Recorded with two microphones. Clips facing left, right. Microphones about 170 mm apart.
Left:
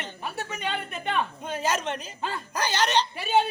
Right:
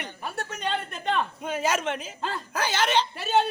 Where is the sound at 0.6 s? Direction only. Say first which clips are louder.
Right 3 dB; 5° left (ahead or behind).